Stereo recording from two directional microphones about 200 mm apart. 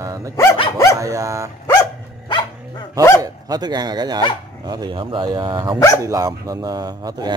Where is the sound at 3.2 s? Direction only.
20° right (ahead or behind).